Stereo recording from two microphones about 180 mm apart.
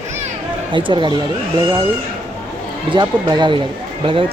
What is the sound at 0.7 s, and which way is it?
Speech, 25° right (ahead or behind).